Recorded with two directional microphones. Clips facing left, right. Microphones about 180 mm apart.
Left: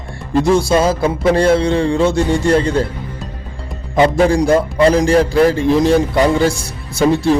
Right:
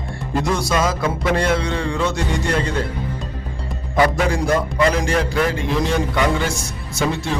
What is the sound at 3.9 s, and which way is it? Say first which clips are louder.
A man's voice: left 6 dB; 25° left (ahead or behind).